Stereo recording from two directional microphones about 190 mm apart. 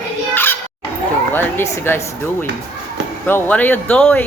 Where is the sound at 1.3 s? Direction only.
10° left (ahead or behind).